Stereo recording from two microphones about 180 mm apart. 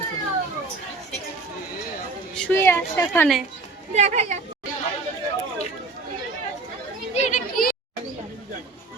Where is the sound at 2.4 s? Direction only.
10° left (ahead or behind).